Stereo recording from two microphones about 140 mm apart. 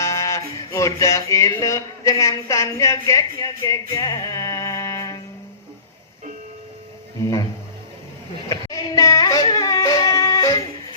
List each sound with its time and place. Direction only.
0.0 s music: 20° left (ahead or behind)
7.2 s a sound: 25° left (ahead or behind)
8.4 s yodeling: 25° left (ahead or behind)